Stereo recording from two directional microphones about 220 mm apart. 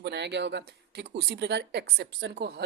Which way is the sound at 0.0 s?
50° right (ahead or behind).